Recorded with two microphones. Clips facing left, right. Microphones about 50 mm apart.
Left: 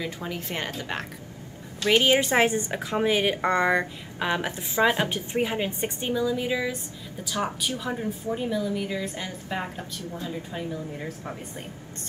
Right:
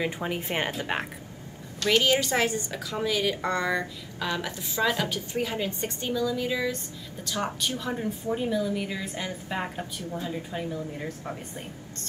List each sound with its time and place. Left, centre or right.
0.0 s a woman's voice: right
1.8 s a woman's voice: left
7.8 s a woman's voice: centre